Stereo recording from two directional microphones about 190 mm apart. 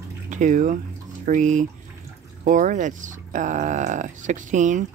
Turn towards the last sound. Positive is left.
turn(degrees=-40)  # may be behind; listen again after turning